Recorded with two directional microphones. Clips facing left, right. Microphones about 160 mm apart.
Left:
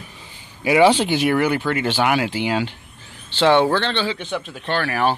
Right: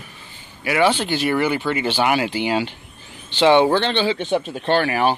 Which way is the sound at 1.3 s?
5° right (ahead or behind).